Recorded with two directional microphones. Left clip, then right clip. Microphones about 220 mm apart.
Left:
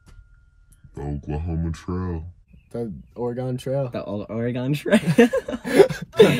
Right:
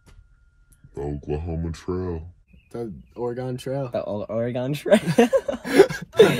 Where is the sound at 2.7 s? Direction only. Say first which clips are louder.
Left 2 dB; 15° left (ahead or behind).